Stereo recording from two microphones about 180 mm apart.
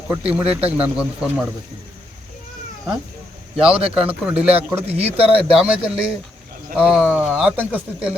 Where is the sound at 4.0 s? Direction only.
5° right (ahead or behind).